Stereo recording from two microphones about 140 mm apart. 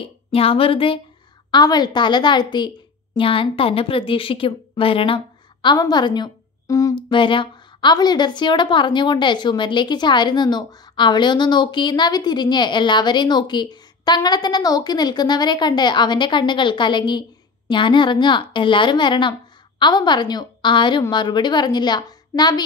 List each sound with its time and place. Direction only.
0.0 s a woman's voice: 45° left (ahead or behind)
1.5 s a woman's voice: 30° left (ahead or behind)
7.1 s a woman's voice: 35° left (ahead or behind)